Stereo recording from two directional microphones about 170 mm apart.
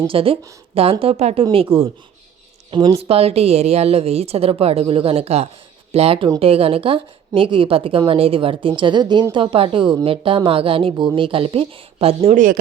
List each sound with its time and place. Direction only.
0.1 s speech: 35° right (ahead or behind)